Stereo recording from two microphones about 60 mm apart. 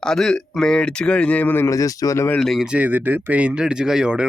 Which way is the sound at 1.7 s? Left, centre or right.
Left.